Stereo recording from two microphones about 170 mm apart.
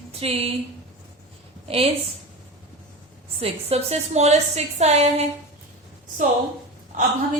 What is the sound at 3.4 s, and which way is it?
A woman's voice, 35° right (ahead or behind).